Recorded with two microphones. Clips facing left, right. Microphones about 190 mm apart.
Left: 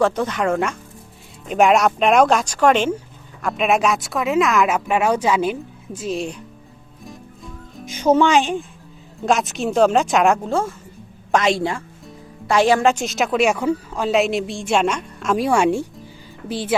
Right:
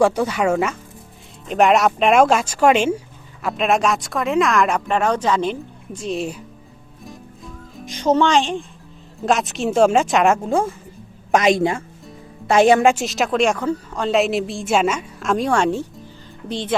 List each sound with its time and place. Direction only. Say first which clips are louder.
0.0 s speech: right 2 dB; 10° right (ahead or behind)
7.0 s music: even; centre (ahead or behind)
9.2 s speech: even; centre (ahead or behind)
10.5 s a woman's voice: right 2 dB; 15° right (ahead or behind)
12.9 s speech: even; centre (ahead or behind)